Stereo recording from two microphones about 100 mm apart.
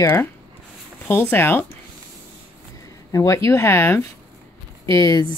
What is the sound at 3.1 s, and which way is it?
Speech, 30° left (ahead or behind).